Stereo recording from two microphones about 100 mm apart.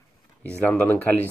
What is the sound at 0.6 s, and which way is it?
Speech, 15° left (ahead or behind).